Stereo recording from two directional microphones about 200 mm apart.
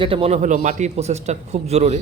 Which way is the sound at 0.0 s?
30° right (ahead or behind).